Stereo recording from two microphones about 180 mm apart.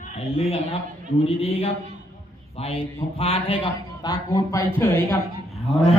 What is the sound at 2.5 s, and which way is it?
A man's voice, 35° left (ahead or behind).